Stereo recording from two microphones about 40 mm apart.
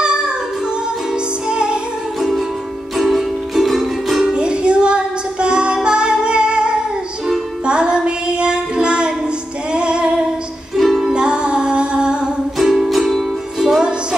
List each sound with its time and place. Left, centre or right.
1.5 s music: right
2.1 s music: centre
4.2 s music: right
7.6 s child singing: right
9.7 s female singing: right
10.8 s music: centre
11.1 s music: right
12.8 s music: centre